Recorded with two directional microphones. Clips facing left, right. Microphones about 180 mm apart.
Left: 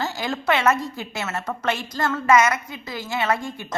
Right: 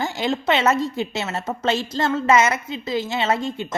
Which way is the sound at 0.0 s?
20° right (ahead or behind).